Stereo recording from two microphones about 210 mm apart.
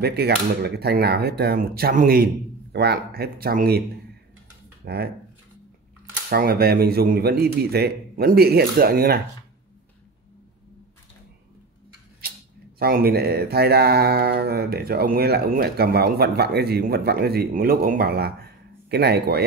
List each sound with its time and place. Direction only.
0.0 s speech: 50° right (ahead or behind)
4.8 s speech: 50° right (ahead or behind)
6.3 s speech: 45° right (ahead or behind)
12.7 s speech: 45° right (ahead or behind)